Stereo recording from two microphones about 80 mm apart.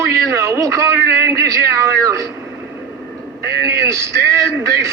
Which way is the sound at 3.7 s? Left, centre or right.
Right.